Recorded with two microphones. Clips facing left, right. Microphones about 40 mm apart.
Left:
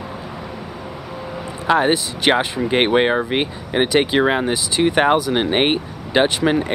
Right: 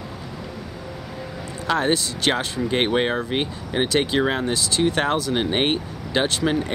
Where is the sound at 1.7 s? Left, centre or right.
Left.